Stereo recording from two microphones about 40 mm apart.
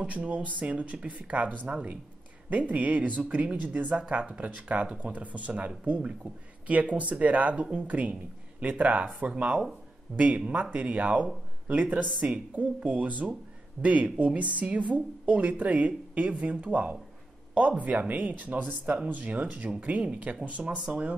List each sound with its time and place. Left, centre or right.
0.0 s speech: right